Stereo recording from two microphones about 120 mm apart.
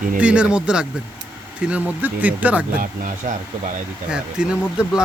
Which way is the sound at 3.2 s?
90° right.